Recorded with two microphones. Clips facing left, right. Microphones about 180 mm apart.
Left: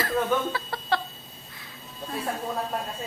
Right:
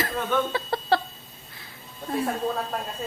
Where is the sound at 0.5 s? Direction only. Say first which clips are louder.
Right 4 dB; 30° right (ahead or behind).